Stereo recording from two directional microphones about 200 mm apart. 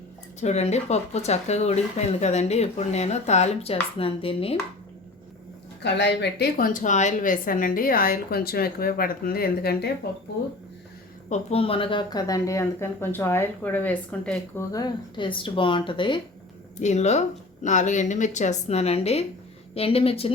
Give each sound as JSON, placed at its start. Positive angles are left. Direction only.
{"t": 0.3, "sound": "speech", "side_deg": 35}
{"t": 5.8, "sound": "speech", "side_deg": 55}
{"t": 11.3, "sound": "speech", "side_deg": 30}
{"t": 16.8, "sound": "speech", "side_deg": 35}